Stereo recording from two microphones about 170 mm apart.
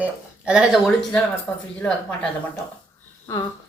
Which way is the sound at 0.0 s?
5° right (ahead or behind).